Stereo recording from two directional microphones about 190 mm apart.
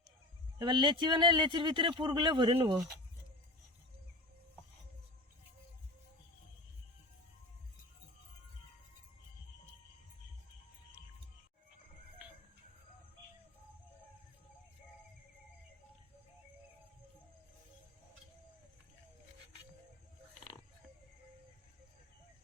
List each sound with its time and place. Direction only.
0.6 s a man's voice: 25° right (ahead or behind)